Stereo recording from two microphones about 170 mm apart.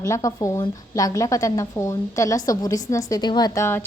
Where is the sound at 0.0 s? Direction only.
20° left (ahead or behind).